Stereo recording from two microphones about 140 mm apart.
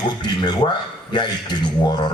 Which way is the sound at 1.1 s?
30° left (ahead or behind).